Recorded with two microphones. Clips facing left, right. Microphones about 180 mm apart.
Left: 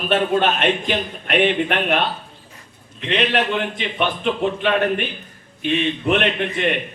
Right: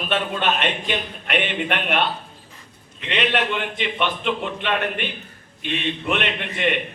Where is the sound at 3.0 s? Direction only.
45° left (ahead or behind).